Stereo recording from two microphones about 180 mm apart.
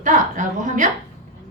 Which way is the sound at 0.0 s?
45° right (ahead or behind).